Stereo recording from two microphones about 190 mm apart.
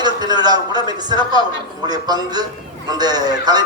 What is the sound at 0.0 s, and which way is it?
A man's voice, 20° right (ahead or behind).